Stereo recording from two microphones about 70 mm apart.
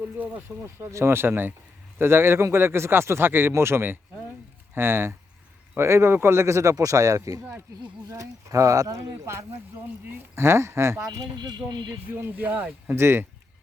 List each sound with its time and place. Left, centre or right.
0.2 s speech: right
0.4 s a man's voice: right
10.1 s a man's voice: right
11.0 s speech: right
12.1 s speech: right
13.0 s a man's voice: right